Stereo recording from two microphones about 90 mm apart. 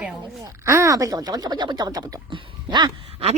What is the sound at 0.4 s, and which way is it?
Speech, 35° right (ahead or behind).